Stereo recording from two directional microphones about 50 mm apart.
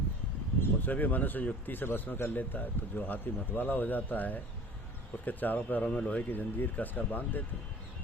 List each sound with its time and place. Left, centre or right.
0.6 s speech: left